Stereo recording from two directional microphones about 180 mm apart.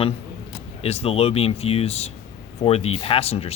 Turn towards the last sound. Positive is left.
turn(degrees=35)  # may be behind; listen again after turning